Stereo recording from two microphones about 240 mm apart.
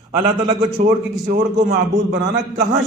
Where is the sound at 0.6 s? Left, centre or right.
Right.